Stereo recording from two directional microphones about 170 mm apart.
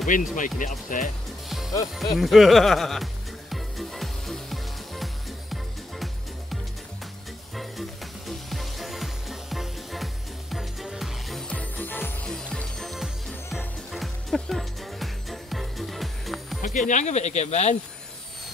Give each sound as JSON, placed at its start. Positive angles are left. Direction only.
{"t": 0.0, "sound": "speech", "side_deg": 50}
{"t": 2.1, "sound": "music", "side_deg": 0}
{"t": 8.3, "sound": "music", "side_deg": 0}
{"t": 16.6, "sound": "speech", "side_deg": 45}